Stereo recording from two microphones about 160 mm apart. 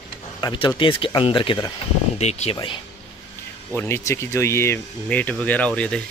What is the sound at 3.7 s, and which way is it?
Speech, 15° left (ahead or behind).